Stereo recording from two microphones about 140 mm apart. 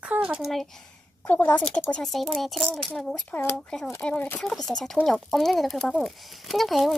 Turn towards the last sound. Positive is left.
turn(degrees=0)  # may be behind; listen again after turning